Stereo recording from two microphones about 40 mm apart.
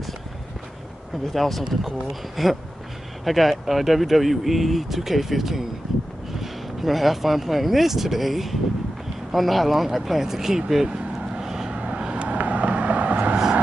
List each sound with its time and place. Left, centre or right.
1.3 s speech: centre
10.9 s vehicle: centre
11.7 s vehicle: right
12.4 s vehicle: right